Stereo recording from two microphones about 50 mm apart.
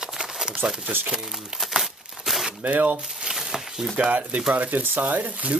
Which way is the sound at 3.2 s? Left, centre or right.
Centre.